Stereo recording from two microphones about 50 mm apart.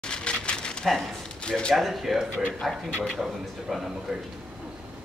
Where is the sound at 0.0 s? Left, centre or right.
Centre.